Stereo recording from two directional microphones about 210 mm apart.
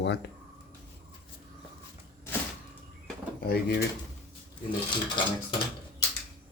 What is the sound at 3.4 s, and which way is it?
Speech, 50° left (ahead or behind).